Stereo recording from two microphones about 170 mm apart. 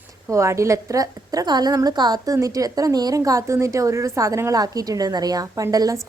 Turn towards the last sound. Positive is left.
turn(degrees=-20)  # may be behind; listen again after turning